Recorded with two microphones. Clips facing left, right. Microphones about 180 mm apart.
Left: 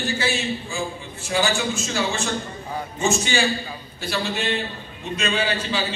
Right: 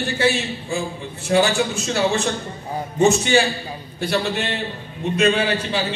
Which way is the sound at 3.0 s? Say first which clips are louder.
Right 7 dB; 65° right (ahead or behind).